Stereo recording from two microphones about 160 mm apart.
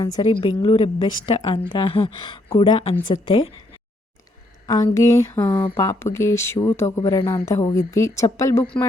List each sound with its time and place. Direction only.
0.0 s a woman's voice: 25° left (ahead or behind)
4.6 s a woman's voice: 25° left (ahead or behind)